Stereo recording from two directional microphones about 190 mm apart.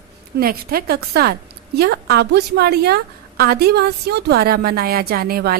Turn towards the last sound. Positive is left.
turn(degrees=-55)  # may be behind; listen again after turning